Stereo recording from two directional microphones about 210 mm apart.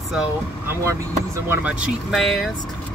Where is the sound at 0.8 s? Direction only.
15° right (ahead or behind).